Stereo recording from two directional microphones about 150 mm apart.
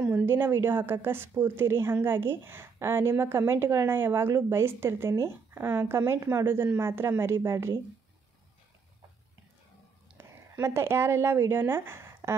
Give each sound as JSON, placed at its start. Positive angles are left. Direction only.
{"t": 0.0, "sound": "a woman's voice", "side_deg": -15}
{"t": 10.1, "sound": "speech", "side_deg": -15}